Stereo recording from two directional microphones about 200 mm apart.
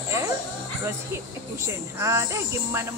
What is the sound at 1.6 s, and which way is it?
Speech, 15° right (ahead or behind).